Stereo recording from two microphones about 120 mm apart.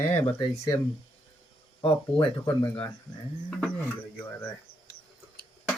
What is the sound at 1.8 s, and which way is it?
Speech, 45° left (ahead or behind).